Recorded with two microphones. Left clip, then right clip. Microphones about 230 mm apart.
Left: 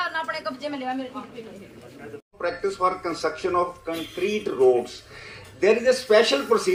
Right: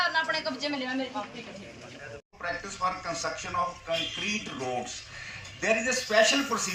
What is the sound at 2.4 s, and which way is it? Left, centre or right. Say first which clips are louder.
Speech: left 7 dB; left.